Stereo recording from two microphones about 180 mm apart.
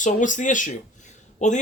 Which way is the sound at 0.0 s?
45° left (ahead or behind).